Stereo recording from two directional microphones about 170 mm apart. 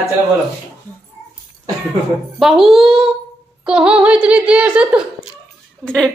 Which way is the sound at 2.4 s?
Centre (ahead or behind).